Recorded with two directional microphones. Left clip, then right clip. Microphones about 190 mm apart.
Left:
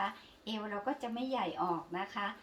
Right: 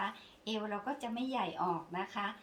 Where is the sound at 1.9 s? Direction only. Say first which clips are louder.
Even; 25° right (ahead or behind).